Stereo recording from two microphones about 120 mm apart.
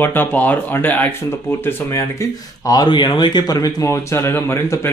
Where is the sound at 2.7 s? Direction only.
35° left (ahead or behind).